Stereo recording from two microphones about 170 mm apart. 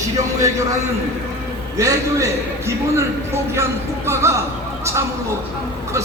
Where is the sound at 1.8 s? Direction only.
20° right (ahead or behind).